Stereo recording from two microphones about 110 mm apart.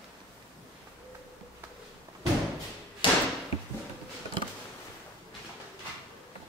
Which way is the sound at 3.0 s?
50° left (ahead or behind).